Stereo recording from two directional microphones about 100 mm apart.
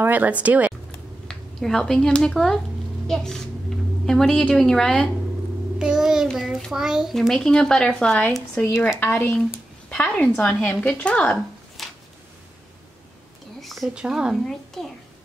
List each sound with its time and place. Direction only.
0.0 s speech: 15° right (ahead or behind)
1.2 s a child's voice: 5° left (ahead or behind)
5.8 s a sound: 5° right (ahead or behind)
6.3 s a child's voice: 5° right (ahead or behind)
9.0 s a woman's voice: 20° left (ahead or behind)
11.8 s a sound: centre (ahead or behind)
13.6 s speech: centre (ahead or behind)
14.8 s a child's voice: 5° left (ahead or behind)